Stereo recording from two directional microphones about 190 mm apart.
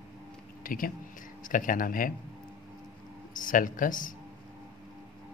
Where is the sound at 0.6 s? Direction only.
45° left (ahead or behind).